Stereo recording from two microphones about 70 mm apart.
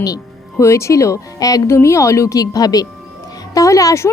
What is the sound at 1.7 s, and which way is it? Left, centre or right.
Speech, left.